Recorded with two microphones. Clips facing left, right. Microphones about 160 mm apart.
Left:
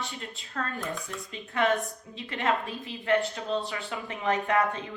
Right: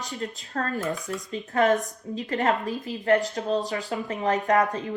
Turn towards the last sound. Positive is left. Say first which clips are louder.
# right 4 dB
turn(degrees=-40)  # may be behind; listen again after turning